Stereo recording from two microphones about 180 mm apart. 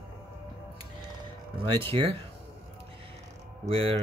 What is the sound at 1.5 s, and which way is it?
Speech, 30° right (ahead or behind).